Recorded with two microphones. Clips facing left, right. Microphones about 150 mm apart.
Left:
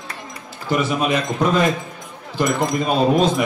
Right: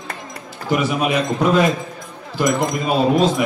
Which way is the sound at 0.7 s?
10° right (ahead or behind).